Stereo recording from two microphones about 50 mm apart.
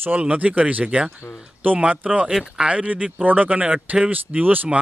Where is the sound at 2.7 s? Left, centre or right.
Right.